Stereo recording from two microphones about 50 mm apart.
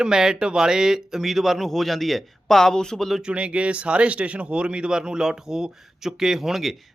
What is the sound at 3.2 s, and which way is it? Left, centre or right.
Speech, centre.